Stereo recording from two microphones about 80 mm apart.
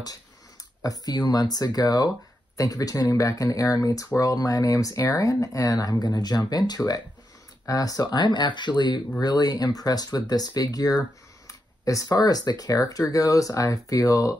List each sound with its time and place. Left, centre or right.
0.8 s speech: left